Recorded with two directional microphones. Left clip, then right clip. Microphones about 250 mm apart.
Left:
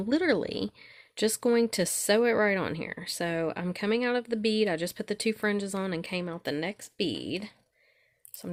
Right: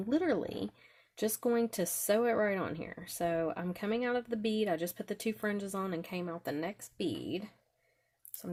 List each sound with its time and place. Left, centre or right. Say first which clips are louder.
0.1 s speech: left 5 dB; left